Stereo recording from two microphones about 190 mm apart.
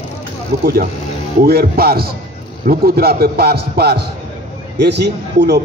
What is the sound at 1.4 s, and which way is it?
A man's voice, 55° right (ahead or behind).